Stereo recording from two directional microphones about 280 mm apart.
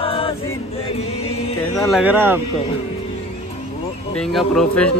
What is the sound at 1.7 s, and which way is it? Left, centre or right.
Speech, centre.